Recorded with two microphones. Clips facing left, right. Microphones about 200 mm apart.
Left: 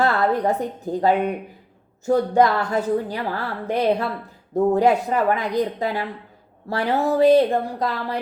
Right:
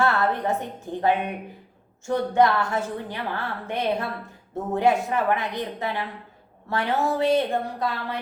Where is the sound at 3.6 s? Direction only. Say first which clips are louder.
Left 6 dB; 40° left (ahead or behind).